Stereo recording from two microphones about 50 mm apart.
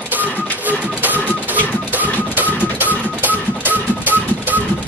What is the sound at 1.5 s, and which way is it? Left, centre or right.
Music, right.